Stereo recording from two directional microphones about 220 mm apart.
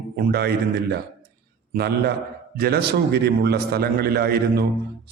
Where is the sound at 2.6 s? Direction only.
45° right (ahead or behind).